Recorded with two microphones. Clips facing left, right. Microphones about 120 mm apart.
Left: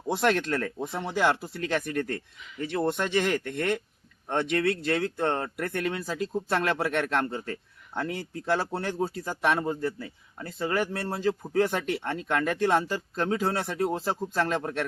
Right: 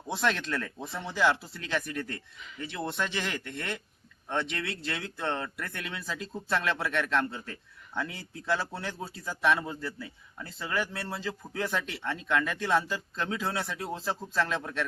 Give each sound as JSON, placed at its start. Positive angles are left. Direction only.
{"t": 0.1, "sound": "speech", "side_deg": 50}